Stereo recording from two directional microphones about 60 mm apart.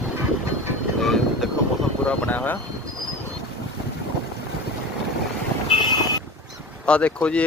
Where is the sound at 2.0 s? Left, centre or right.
Left.